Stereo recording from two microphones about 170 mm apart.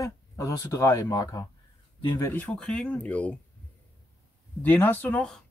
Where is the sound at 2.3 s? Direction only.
5° left (ahead or behind).